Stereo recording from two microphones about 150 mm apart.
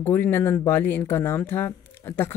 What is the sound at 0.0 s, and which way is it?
Speech, 15° left (ahead or behind).